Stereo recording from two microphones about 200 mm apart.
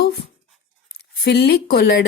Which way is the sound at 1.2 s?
55° left (ahead or behind).